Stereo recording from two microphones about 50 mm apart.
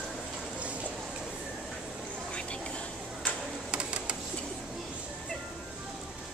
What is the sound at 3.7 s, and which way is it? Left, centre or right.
Printer, right.